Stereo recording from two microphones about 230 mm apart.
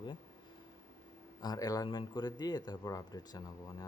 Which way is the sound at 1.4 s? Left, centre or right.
Centre.